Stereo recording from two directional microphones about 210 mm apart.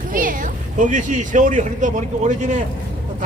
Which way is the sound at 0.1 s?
40° right (ahead or behind).